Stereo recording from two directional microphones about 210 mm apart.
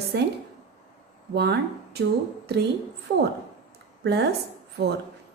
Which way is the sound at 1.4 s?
50° right (ahead or behind).